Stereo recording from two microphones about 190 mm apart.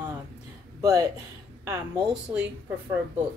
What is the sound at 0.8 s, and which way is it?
Speech, 15° right (ahead or behind).